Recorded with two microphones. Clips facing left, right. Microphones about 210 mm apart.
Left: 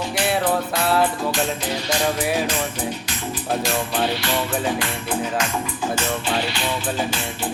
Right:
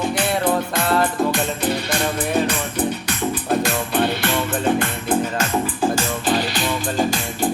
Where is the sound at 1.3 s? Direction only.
55° right (ahead or behind).